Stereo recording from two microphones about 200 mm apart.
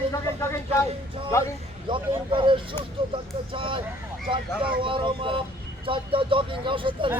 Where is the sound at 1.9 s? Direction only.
25° right (ahead or behind).